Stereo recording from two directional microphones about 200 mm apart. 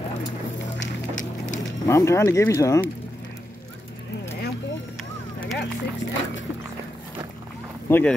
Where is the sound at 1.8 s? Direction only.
15° left (ahead or behind).